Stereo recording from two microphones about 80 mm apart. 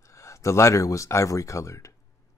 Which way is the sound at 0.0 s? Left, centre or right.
Left.